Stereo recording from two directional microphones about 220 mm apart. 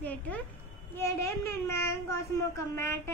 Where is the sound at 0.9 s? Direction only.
10° left (ahead or behind).